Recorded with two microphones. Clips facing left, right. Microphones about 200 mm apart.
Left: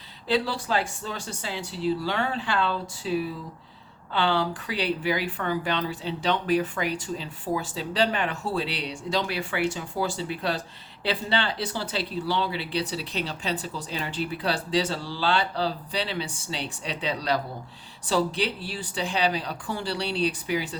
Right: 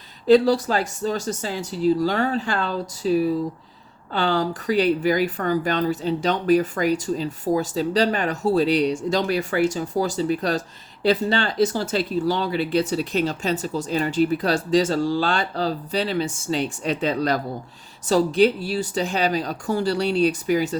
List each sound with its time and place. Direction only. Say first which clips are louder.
0.3 s speech: right 10 dB; 45° right (ahead or behind)